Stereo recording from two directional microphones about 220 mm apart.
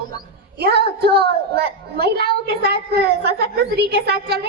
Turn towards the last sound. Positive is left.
turn(degrees=-45)  # may be behind; listen again after turning